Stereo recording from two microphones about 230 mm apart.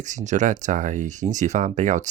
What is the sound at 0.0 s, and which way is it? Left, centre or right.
Speech, right.